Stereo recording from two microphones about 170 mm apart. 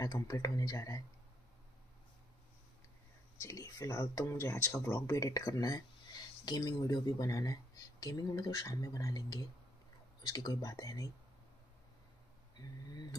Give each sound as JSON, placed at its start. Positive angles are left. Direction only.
{"t": 0.0, "sound": "speech", "side_deg": 20}
{"t": 3.3, "sound": "speech", "side_deg": 20}
{"t": 12.5, "sound": "speech", "side_deg": 25}